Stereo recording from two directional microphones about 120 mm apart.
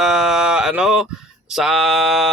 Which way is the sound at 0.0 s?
5° right (ahead or behind).